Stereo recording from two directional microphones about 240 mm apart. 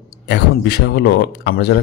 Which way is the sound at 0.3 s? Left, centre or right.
Left.